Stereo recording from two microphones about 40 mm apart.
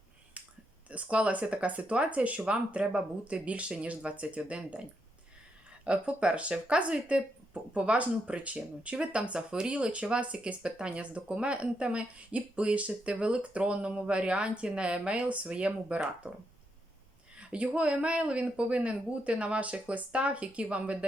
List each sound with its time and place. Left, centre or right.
0.9 s speech: right
2.5 s speech: right
17.3 s speech: right